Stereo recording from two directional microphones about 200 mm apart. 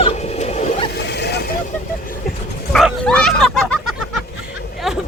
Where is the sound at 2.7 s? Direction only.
5° left (ahead or behind).